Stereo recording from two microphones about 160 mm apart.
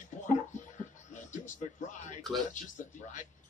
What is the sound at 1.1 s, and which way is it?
Speech, 50° left (ahead or behind).